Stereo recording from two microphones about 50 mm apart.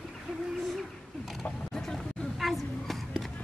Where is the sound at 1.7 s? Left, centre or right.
Centre.